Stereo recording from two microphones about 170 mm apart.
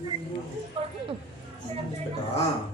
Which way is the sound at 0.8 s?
35° right (ahead or behind).